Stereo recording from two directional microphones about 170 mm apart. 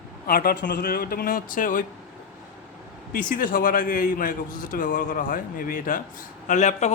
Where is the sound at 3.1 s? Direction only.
55° left (ahead or behind).